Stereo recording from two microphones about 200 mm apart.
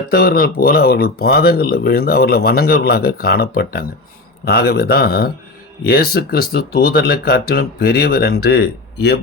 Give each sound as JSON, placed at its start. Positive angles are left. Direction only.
{"t": 0.1, "sound": "speech", "side_deg": 50}